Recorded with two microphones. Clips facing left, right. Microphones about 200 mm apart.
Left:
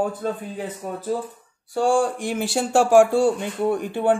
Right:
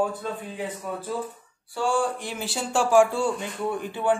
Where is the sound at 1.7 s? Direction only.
50° left (ahead or behind).